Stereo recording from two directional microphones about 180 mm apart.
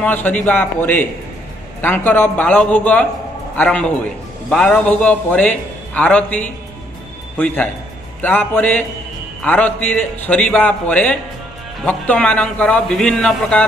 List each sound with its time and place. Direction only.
0.0 s a man's voice: 10° left (ahead or behind)